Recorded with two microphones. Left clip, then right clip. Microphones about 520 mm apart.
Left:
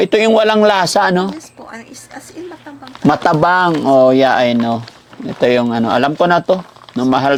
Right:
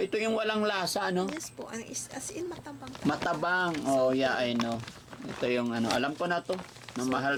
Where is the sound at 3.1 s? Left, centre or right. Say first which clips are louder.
Left 17 dB; left.